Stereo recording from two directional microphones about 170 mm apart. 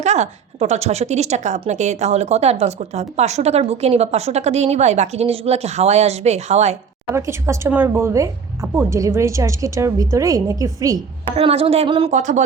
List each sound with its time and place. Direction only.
0.0 s a woman's voice: 40° right (ahead or behind)
7.1 s speech: 15° right (ahead or behind)
11.3 s a woman's voice: 35° right (ahead or behind)